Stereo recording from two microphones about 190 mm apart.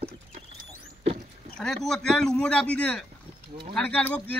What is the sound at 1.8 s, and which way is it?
Speech, 5° left (ahead or behind).